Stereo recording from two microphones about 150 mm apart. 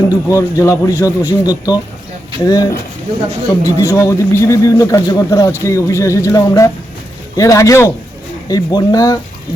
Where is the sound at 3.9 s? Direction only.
20° left (ahead or behind).